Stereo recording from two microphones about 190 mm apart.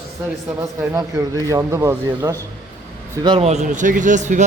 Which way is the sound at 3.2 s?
30° right (ahead or behind).